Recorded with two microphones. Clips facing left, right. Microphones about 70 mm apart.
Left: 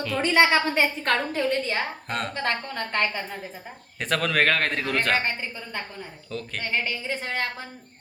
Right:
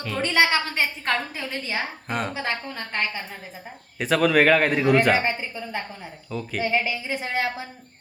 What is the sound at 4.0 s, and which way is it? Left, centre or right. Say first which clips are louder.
A woman's voice: right 5 dB; centre.